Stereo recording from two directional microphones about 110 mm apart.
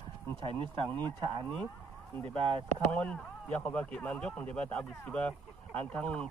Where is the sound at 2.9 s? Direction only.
10° left (ahead or behind).